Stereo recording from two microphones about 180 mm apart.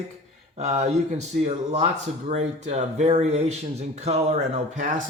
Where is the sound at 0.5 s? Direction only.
40° right (ahead or behind).